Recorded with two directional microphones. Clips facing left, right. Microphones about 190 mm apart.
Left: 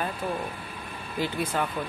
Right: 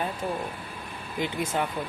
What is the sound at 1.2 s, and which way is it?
Speech, 15° right (ahead or behind).